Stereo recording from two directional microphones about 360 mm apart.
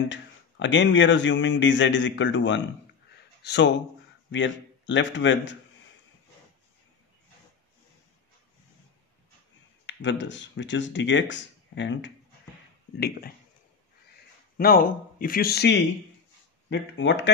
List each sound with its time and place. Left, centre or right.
0.1 s a man's voice: left
9.8 s speech: left
14.6 s speech: left